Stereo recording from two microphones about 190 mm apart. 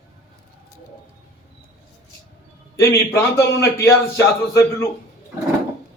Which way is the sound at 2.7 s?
15° left (ahead or behind).